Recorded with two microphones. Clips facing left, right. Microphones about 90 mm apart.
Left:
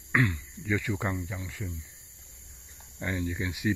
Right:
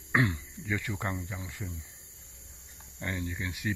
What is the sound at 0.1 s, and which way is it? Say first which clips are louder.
Speech: left 1 dB; 20° right (ahead or behind).